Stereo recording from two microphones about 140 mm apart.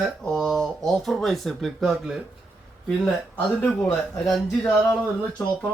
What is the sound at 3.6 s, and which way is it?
Speech, 10° left (ahead or behind).